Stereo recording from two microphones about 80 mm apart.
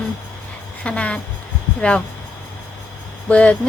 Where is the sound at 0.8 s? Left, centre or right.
Centre.